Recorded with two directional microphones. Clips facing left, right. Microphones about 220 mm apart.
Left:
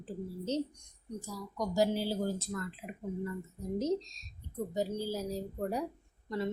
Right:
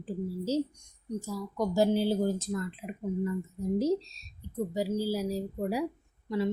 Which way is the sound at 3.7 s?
10° right (ahead or behind).